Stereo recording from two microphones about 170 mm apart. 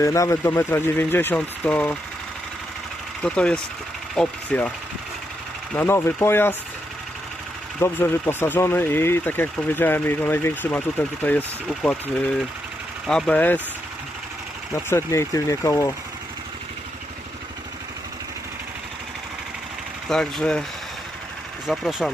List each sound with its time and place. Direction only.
0.0 s speech: 20° left (ahead or behind)
3.2 s speech: 5° left (ahead or behind)
5.7 s speech: 15° left (ahead or behind)
7.8 s speech: 15° left (ahead or behind)
14.8 s speech: 15° left (ahead or behind)
20.1 s speech: 5° left (ahead or behind)
21.7 s speech: centre (ahead or behind)